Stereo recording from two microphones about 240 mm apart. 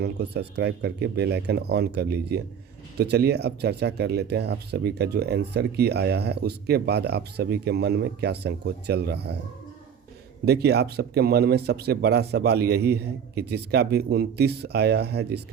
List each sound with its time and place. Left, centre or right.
0.0 s speech: right
10.4 s speech: right